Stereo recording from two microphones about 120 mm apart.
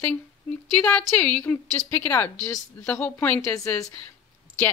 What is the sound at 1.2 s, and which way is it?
Speech, 10° left (ahead or behind).